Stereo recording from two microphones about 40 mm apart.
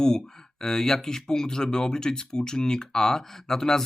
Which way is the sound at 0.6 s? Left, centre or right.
Centre.